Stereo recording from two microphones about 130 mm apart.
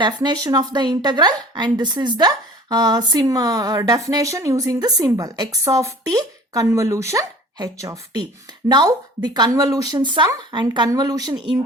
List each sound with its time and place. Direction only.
0.0 s a woman's voice: 30° right (ahead or behind)
9.9 s a woman's voice: 35° right (ahead or behind)